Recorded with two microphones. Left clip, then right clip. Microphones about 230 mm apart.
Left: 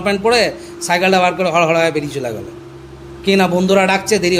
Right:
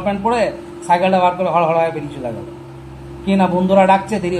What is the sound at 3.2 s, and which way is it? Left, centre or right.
A man's voice, left.